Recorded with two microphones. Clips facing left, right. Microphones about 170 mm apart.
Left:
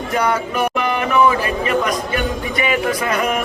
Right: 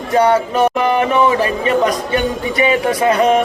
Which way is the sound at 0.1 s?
30° right (ahead or behind).